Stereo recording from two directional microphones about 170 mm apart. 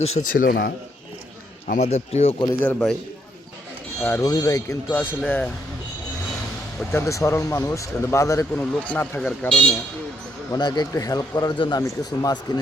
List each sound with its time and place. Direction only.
0.0 s a man's voice: 50° left (ahead or behind)
1.6 s speech: 45° left (ahead or behind)
2.4 s speech: 15° left (ahead or behind)
4.0 s speech: 15° left (ahead or behind)
6.9 s speech: 20° left (ahead or behind)
10.5 s a man's voice: 25° left (ahead or behind)